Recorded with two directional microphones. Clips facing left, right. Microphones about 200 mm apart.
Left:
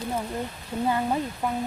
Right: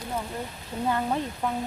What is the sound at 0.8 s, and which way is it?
Speech, 5° left (ahead or behind).